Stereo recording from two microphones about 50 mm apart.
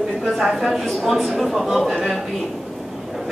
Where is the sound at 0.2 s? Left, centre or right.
Centre.